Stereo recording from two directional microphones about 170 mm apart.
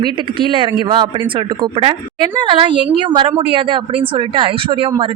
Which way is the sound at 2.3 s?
30° right (ahead or behind).